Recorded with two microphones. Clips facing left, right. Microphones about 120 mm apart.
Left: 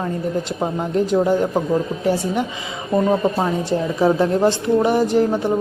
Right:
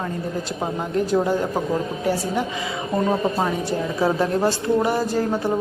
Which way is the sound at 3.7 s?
25° left (ahead or behind).